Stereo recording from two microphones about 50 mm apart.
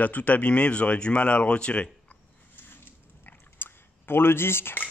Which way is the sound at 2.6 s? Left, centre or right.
Left.